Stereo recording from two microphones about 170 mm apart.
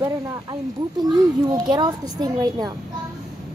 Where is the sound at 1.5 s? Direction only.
25° right (ahead or behind).